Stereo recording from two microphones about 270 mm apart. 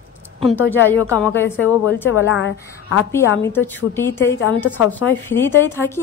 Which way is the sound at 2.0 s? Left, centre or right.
Left.